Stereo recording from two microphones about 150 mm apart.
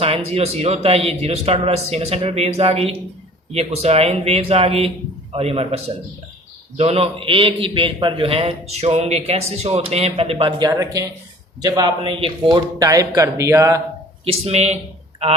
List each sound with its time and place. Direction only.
0.0 s a man's voice: 40° right (ahead or behind)
10.7 s a man's voice: 25° right (ahead or behind)
14.3 s speech: 45° right (ahead or behind)